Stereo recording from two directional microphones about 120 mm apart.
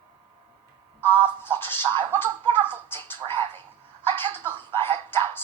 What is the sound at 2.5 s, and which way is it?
Speech, 20° left (ahead or behind).